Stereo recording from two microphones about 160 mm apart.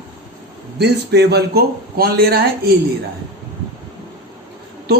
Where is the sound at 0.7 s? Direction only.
90° right.